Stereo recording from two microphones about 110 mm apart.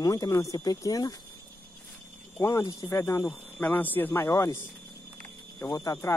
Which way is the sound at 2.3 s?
30° left (ahead or behind).